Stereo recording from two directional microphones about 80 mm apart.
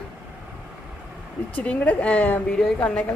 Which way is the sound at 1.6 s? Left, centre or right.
Left.